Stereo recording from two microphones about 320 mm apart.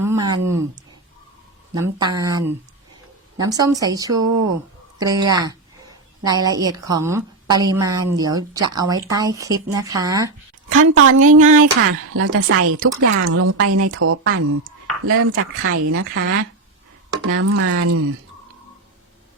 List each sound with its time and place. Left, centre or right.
0.0 s a woman's voice: centre
10.7 s a woman's voice: right
11.3 s speech: right
11.5 s speech: right